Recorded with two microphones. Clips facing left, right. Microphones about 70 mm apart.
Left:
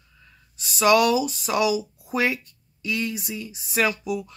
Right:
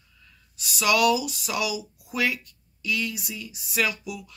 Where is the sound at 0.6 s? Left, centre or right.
Left.